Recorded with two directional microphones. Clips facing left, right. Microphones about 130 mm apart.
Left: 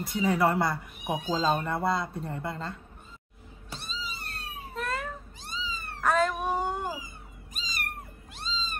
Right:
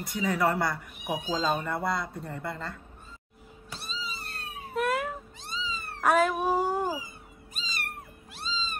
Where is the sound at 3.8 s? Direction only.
Centre (ahead or behind).